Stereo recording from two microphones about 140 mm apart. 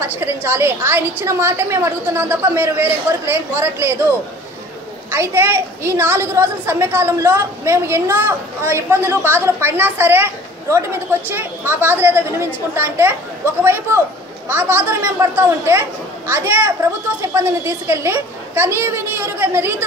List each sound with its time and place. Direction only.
0.0 s a woman's voice: 15° right (ahead or behind)